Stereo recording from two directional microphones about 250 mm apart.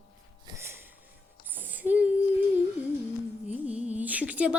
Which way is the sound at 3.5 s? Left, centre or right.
Centre.